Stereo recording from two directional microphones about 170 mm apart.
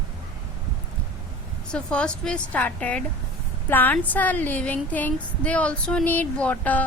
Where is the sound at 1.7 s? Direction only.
5° left (ahead or behind).